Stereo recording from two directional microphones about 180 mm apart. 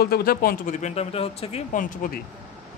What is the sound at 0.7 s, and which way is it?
A man's voice, 35° left (ahead or behind).